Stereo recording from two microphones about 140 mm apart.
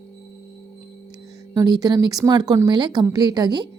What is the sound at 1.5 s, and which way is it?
Speech, 25° right (ahead or behind).